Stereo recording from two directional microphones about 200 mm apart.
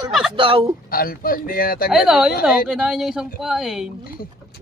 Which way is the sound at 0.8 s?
45° left (ahead or behind).